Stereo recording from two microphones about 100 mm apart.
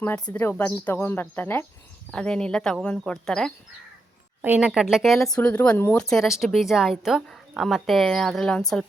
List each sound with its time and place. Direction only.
0.3 s speech: 20° left (ahead or behind)
4.4 s speech: 15° right (ahead or behind)
5.4 s speech: 15° left (ahead or behind)